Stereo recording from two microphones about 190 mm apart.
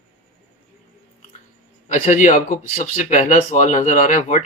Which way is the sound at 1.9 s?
40° left (ahead or behind).